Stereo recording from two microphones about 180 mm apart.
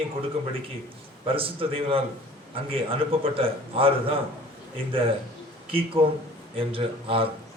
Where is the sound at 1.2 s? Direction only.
30° right (ahead or behind).